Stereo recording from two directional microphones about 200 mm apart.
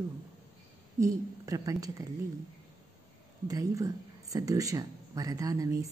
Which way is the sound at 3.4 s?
15° right (ahead or behind).